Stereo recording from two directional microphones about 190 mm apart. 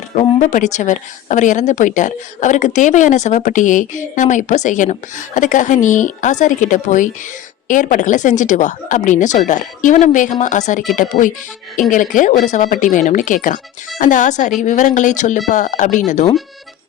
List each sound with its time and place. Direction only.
0.1 s speech: 30° left (ahead or behind)
0.5 s speech: 40° left (ahead or behind)